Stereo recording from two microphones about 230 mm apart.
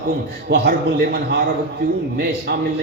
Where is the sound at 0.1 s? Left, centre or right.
Right.